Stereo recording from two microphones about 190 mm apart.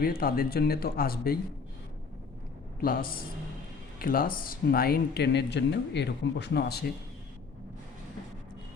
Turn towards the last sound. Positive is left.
turn(degrees=60)  # may be behind; listen again after turning